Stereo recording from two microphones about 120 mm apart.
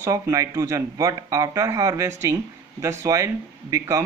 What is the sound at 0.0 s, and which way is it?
Speech, 25° right (ahead or behind).